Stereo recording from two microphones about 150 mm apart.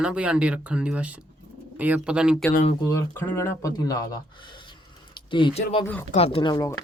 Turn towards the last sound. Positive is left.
turn(degrees=30)  # may be behind; listen again after turning